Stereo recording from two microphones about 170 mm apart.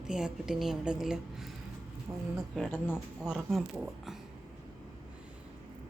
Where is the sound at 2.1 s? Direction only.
20° right (ahead or behind).